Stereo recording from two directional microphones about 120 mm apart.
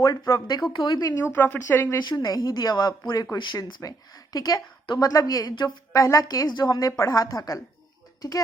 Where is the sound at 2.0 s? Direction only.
30° left (ahead or behind).